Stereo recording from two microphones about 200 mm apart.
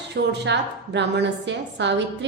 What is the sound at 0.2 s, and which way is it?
A woman's voice, 55° right (ahead or behind).